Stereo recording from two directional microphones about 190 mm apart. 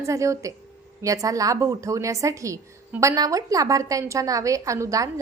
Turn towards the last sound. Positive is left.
turn(degrees=-15)  # may be behind; listen again after turning